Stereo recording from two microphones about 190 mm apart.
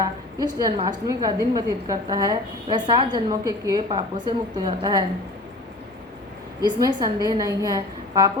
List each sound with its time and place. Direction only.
0.0 s a sound: 20° right (ahead or behind)
0.9 s a woman's voice: 20° right (ahead or behind)
6.7 s a woman's voice: 20° right (ahead or behind)